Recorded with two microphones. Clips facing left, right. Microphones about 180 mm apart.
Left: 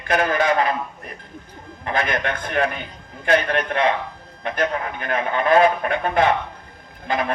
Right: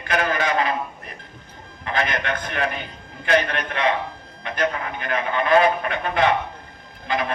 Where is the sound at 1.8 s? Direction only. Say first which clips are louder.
Left 1 dB; 50° left (ahead or behind).